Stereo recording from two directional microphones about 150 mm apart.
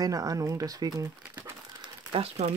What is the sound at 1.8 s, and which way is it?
Crumpling, 40° right (ahead or behind).